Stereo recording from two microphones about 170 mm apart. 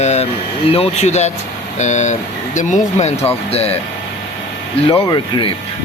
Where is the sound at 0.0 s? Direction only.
40° left (ahead or behind).